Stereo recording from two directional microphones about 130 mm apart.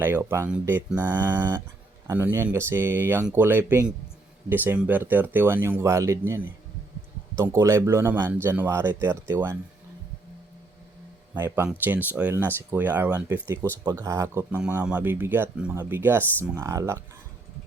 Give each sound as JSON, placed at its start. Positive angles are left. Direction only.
{"t": 0.0, "sound": "speech", "side_deg": -20}
{"t": 1.0, "sound": "a man's voice", "side_deg": -30}
{"t": 2.1, "sound": "a man's voice", "side_deg": -15}
{"t": 11.3, "sound": "a man's voice", "side_deg": -20}